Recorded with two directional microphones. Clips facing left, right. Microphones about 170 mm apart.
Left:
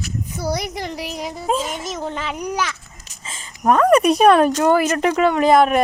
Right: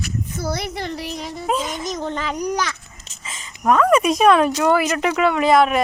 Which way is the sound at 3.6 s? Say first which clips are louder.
Left 2 dB; 40° left (ahead or behind).